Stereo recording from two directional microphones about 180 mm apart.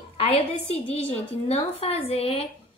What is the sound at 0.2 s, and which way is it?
A woman's voice, 30° left (ahead or behind).